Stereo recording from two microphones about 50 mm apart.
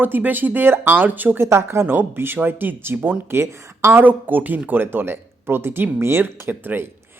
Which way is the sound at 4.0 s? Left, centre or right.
Right.